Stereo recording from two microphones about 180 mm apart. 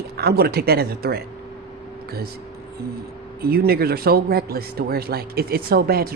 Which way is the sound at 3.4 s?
60° right (ahead or behind).